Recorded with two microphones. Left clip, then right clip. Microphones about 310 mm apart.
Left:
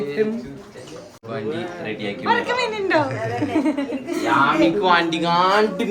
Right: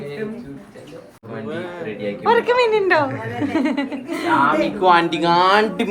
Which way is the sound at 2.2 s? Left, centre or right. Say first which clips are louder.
Right 5 dB; right.